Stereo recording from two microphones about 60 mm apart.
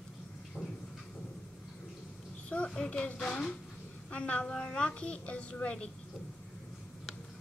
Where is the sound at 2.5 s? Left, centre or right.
Centre.